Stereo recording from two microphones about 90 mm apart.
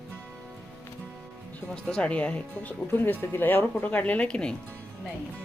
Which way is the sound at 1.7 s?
10° left (ahead or behind).